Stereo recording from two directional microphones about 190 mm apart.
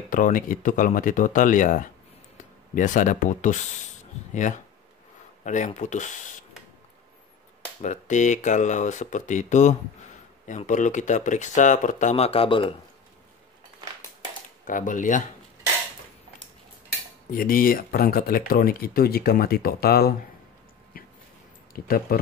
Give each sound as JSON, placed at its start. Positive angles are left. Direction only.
{"t": 0.1, "sound": "speech", "side_deg": 45}
{"t": 7.8, "sound": "speech", "side_deg": 40}
{"t": 14.6, "sound": "speech", "side_deg": 45}
{"t": 17.3, "sound": "speech", "side_deg": 50}
{"t": 21.7, "sound": "speech", "side_deg": 50}